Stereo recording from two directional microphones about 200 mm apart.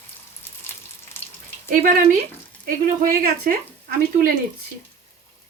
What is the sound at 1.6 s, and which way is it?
Speech, 40° right (ahead or behind).